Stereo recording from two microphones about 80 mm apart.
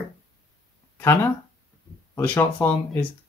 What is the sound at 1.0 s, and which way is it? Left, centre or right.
Speech, left.